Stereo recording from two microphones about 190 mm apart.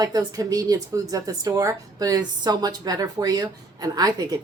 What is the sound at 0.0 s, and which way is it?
A woman's voice, 20° right (ahead or behind).